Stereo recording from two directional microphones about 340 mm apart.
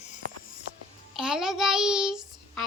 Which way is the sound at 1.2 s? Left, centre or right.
Centre.